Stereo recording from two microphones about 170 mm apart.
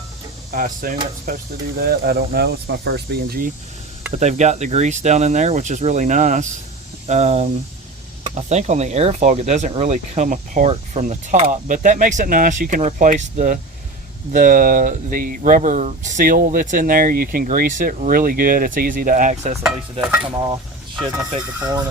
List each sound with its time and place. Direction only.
0.5 s speech: 55° right (ahead or behind)
4.1 s speech: 40° right (ahead or behind)
20.3 s speech: 25° right (ahead or behind)
21.6 s speech: 20° right (ahead or behind)